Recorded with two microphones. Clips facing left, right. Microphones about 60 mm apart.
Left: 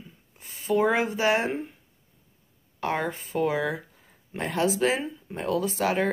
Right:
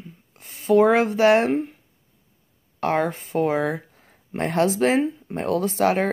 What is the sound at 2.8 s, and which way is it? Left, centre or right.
Speech, right.